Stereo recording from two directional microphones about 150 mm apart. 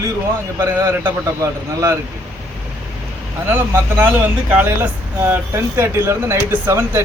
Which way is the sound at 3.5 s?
15° right (ahead or behind).